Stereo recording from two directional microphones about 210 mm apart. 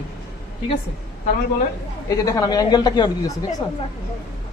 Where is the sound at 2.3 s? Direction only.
15° left (ahead or behind).